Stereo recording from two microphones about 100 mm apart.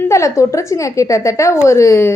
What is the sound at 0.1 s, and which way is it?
A woman's voice, 30° left (ahead or behind).